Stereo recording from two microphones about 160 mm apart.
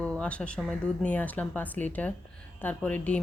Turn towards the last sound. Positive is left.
turn(degrees=10)  # may be behind; listen again after turning